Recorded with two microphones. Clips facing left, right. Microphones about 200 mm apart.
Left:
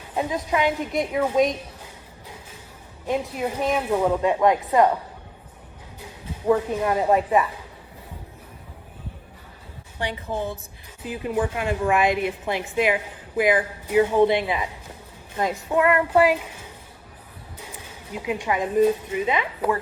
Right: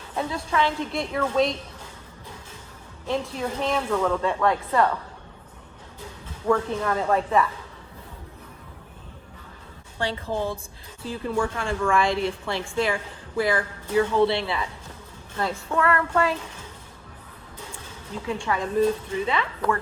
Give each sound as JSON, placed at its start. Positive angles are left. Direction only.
{"t": 0.2, "sound": "speech", "side_deg": 15}
{"t": 3.1, "sound": "speech", "side_deg": 15}
{"t": 6.4, "sound": "speech", "side_deg": 15}
{"t": 11.0, "sound": "speech", "side_deg": 15}
{"t": 18.1, "sound": "speech", "side_deg": 15}